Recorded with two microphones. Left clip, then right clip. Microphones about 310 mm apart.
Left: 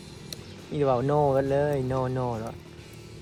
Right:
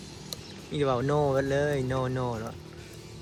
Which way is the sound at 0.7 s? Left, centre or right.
Centre.